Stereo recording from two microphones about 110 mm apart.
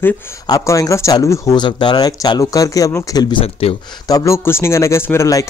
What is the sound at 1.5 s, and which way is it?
Speech, 45° left (ahead or behind).